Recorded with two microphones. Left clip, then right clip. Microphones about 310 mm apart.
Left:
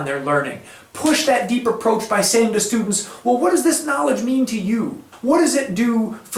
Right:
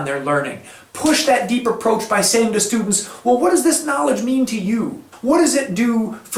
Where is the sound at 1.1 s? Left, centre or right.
Centre.